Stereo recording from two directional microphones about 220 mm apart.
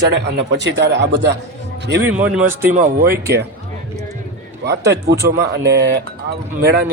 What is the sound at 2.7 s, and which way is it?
Speech, 35° right (ahead or behind).